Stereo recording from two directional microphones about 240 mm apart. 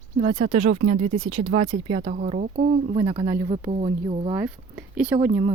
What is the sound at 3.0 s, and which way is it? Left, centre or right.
Speech, centre.